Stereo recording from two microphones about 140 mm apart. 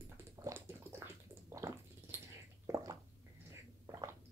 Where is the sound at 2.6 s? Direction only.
25° right (ahead or behind).